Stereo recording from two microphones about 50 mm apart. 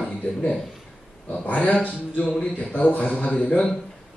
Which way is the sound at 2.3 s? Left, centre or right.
Centre.